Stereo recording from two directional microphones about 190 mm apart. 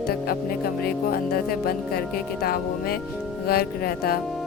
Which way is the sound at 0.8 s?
50° left (ahead or behind).